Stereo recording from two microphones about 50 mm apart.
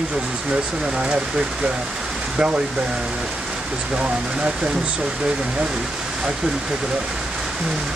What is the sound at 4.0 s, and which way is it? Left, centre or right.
Speech, right.